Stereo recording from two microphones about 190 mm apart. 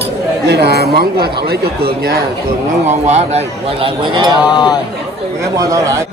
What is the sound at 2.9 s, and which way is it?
Speech, 35° right (ahead or behind).